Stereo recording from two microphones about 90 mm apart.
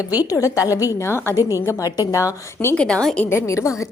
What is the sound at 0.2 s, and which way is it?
A woman's voice, 40° left (ahead or behind).